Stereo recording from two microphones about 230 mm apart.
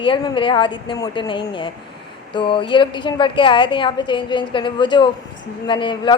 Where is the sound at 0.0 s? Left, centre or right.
Left.